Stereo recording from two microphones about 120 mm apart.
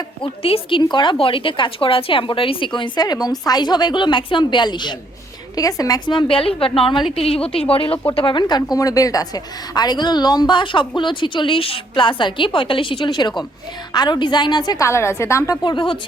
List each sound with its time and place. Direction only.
0.2 s a woman's voice: 50° left (ahead or behind)
14.8 s a woman's voice: 20° left (ahead or behind)
15.6 s a woman's voice: 40° left (ahead or behind)